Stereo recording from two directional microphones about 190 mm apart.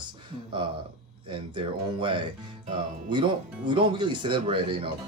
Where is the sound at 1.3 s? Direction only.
25° right (ahead or behind).